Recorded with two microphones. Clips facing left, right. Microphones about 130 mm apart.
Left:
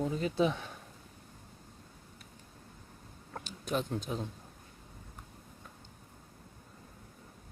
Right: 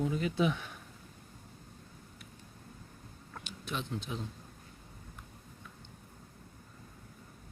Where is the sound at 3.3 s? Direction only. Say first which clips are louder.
Left 6 dB; 40° left (ahead or behind).